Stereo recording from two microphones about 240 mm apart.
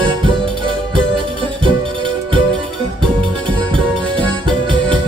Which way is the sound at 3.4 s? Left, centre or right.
Right.